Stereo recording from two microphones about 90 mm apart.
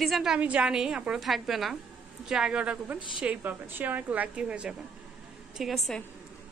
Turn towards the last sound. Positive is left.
turn(degrees=0)  # may be behind; listen again after turning